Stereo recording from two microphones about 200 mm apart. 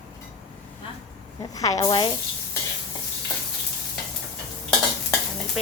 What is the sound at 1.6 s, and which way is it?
Speech, 20° left (ahead or behind).